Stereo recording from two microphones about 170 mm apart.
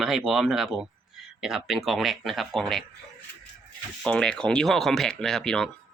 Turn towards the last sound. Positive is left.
turn(degrees=5)  # may be behind; listen again after turning